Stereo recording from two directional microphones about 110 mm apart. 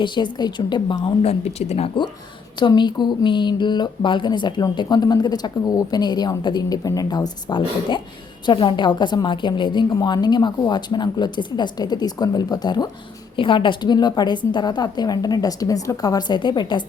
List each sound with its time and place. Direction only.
0.0 s speech: 45° left (ahead or behind)
1.2 s speech: 70° left (ahead or behind)
2.6 s a woman's voice: 45° left (ahead or behind)
13.3 s a woman's voice: 50° left (ahead or behind)